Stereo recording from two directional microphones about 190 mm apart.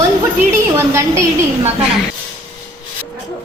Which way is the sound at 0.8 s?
15° right (ahead or behind).